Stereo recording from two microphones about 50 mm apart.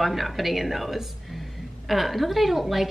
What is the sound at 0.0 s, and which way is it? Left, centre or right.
A woman's voice, centre.